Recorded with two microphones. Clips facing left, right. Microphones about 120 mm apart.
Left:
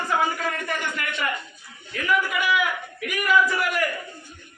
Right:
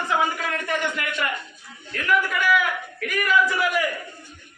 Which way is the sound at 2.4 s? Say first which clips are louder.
Right 2 dB; 15° left (ahead or behind).